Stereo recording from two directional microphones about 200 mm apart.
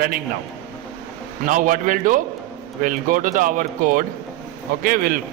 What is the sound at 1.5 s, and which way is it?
A man's voice, 40° right (ahead or behind).